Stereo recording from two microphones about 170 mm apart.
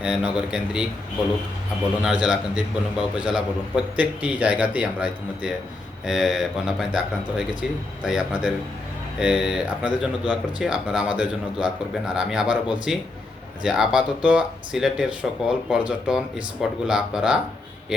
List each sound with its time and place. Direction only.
0.0 s speech: 5° right (ahead or behind)
2.0 s a man's voice: 5° right (ahead or behind)